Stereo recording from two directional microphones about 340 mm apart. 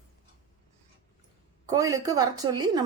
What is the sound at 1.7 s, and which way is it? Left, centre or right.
A woman's voice, centre.